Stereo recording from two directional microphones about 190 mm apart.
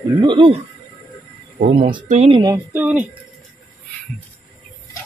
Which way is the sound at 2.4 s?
15° right (ahead or behind).